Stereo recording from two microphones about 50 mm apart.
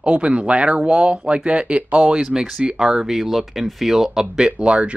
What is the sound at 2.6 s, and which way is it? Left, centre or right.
Speech, centre.